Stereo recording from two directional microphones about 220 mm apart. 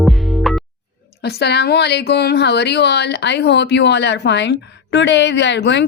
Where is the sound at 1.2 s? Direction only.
50° left (ahead or behind).